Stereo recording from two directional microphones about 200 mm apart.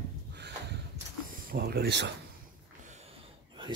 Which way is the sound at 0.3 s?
55° right (ahead or behind).